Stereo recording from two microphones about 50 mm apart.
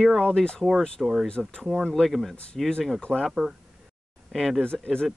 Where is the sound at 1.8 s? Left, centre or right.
Centre.